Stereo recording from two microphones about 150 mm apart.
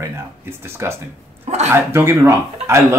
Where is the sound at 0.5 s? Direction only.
15° right (ahead or behind).